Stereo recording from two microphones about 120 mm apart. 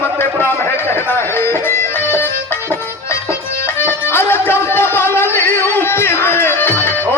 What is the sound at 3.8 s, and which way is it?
Music, 20° left (ahead or behind).